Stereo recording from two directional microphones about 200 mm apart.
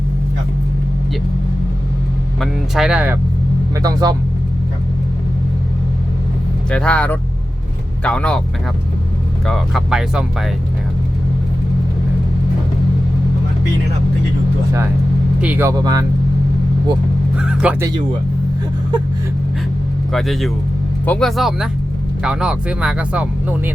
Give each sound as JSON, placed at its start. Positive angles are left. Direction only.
{"t": 2.4, "sound": "speech", "side_deg": 0}
{"t": 3.8, "sound": "speech", "side_deg": -15}
{"t": 6.7, "sound": "speech", "side_deg": 5}
{"t": 9.5, "sound": "speech", "side_deg": 0}
{"t": 15.4, "sound": "speech", "side_deg": -10}
{"t": 17.3, "sound": "speech", "side_deg": -5}
{"t": 20.1, "sound": "speech", "side_deg": 0}